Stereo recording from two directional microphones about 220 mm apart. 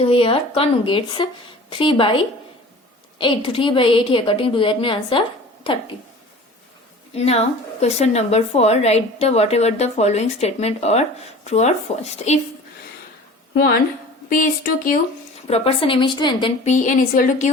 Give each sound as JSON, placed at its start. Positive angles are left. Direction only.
{"t": 0.0, "sound": "a woman's voice", "side_deg": 25}
{"t": 7.1, "sound": "a woman's voice", "side_deg": 30}
{"t": 13.5, "sound": "a woman's voice", "side_deg": 45}
{"t": 15.4, "sound": "a woman's voice", "side_deg": 25}
{"t": 16.6, "sound": "speech", "side_deg": 35}